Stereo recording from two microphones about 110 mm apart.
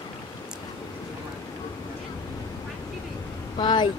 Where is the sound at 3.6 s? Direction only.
45° left (ahead or behind).